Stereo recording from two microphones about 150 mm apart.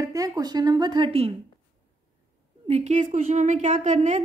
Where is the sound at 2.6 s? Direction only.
45° right (ahead or behind).